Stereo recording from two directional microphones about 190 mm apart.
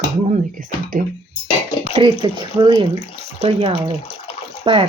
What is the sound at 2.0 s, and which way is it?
Speech, 25° right (ahead or behind).